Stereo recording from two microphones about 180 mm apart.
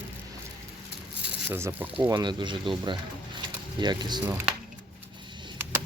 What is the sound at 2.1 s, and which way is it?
Speech, 25° right (ahead or behind).